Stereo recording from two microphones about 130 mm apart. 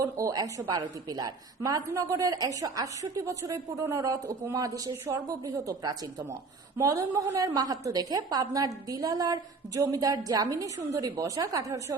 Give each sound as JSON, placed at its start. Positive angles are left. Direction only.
{"t": 0.0, "sound": "a woman's voice", "side_deg": -25}